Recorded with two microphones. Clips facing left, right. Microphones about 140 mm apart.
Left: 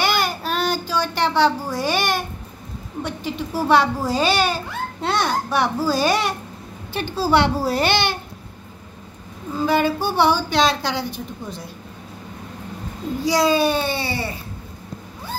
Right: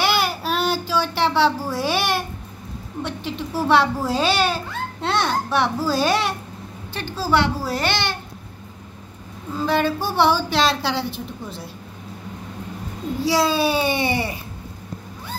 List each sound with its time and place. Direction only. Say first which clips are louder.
0.0 s a sound: even; 5° right (ahead or behind)
3.0 s speech: left 1 dB; centre (ahead or behind)
6.9 s a child's voice: left 3 dB; 15° left (ahead or behind)
9.6 s speech: left 2 dB; 5° left (ahead or behind)
13.2 s speech: left 2 dB; 5° right (ahead or behind)
13.8 s a sound: right 3 dB; 20° right (ahead or behind)